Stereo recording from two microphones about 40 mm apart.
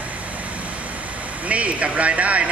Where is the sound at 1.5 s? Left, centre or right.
Right.